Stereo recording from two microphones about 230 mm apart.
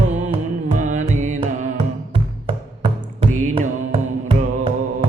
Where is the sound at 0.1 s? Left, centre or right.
Right.